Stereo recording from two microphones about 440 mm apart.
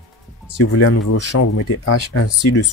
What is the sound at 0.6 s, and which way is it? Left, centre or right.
Speech, left.